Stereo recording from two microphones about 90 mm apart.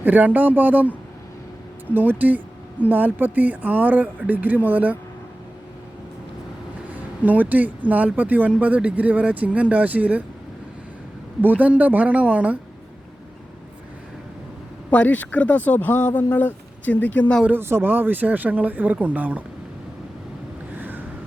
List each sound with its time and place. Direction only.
0.0 s speech: 20° right (ahead or behind)
6.9 s speech: 20° right (ahead or behind)
11.4 s speech: 15° right (ahead or behind)
14.8 s speech: 15° left (ahead or behind)
17.5 s speech: 25° right (ahead or behind)
20.7 s vehicle: 20° right (ahead or behind)